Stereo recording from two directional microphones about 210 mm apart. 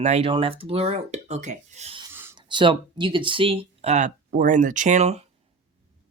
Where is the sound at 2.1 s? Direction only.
10° right (ahead or behind).